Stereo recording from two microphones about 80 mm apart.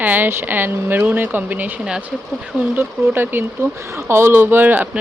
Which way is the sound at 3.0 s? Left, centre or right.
Right.